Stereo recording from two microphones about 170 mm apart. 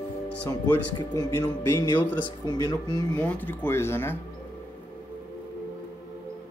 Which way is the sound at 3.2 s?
10° left (ahead or behind).